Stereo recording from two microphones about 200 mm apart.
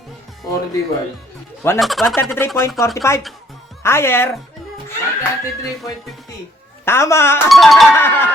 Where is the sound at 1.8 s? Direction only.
Centre (ahead or behind).